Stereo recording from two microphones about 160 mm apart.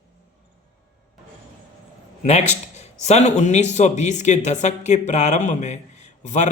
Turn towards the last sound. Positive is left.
turn(degrees=50)  # may be behind; listen again after turning